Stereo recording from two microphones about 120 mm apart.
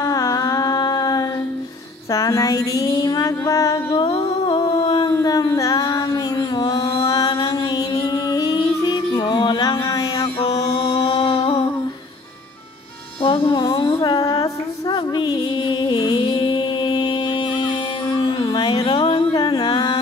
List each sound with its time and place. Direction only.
0.0 s music: 30° left (ahead or behind)
2.1 s a sound: 30° left (ahead or behind)
2.9 s music: 30° left (ahead or behind)
5.0 s music: 30° left (ahead or behind)
11.1 s a sound: 50° left (ahead or behind)
13.2 s music: 45° left (ahead or behind)
13.6 s music: 35° left (ahead or behind)
18.5 s music: 50° left (ahead or behind)